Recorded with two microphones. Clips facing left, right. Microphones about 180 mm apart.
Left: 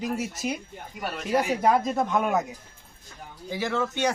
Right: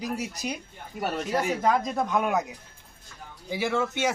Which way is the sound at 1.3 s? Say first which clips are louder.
Left 3 dB; 15° left (ahead or behind).